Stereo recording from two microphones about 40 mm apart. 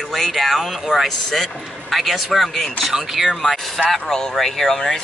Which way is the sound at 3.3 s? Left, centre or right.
Centre.